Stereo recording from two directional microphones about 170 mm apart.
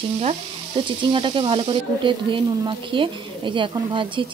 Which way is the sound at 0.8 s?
30° right (ahead or behind).